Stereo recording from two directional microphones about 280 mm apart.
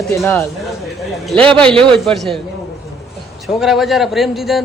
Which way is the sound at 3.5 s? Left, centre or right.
Centre.